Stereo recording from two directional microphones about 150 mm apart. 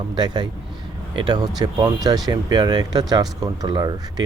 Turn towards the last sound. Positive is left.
turn(degrees=-25)  # may be behind; listen again after turning